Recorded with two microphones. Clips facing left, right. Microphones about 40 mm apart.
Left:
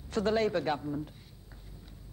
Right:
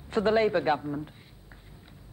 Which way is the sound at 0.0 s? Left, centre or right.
Right.